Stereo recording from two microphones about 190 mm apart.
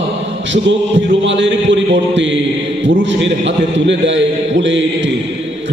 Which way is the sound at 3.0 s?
75° right (ahead or behind).